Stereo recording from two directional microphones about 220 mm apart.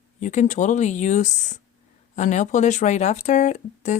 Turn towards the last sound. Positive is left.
turn(degrees=35)  # may be behind; listen again after turning